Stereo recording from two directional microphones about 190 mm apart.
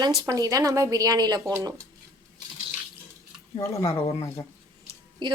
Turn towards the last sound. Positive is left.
turn(degrees=-25)  # may be behind; listen again after turning